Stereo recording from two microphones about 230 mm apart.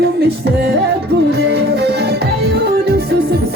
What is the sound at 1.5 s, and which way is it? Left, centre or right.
Music, right.